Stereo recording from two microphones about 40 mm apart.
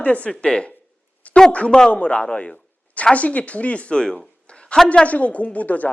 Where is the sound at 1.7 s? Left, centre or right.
Centre.